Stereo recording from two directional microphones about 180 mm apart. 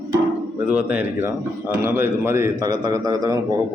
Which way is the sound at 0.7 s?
10° right (ahead or behind).